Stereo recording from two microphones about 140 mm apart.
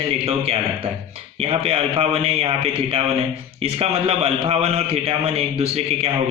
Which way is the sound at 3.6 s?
45° right (ahead or behind).